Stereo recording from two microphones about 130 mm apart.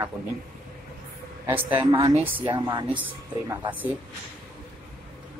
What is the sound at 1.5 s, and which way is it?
Speech, 45° right (ahead or behind).